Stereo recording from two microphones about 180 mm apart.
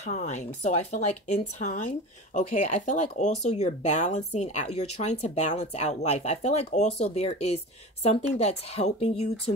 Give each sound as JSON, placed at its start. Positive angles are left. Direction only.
{"t": 0.0, "sound": "speech", "side_deg": 40}